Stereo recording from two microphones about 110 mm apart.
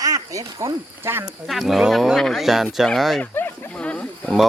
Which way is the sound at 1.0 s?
20° right (ahead or behind).